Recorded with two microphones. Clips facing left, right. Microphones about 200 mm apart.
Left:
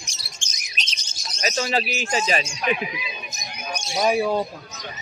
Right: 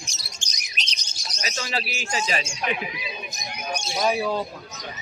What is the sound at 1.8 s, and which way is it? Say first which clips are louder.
Speech: left 4 dB; 20° left (ahead or behind).